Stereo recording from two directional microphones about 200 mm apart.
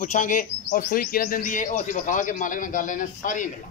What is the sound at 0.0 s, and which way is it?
A man's voice, 40° left (ahead or behind).